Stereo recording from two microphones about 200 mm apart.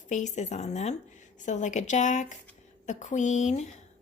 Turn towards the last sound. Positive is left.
turn(degrees=35)  # may be behind; listen again after turning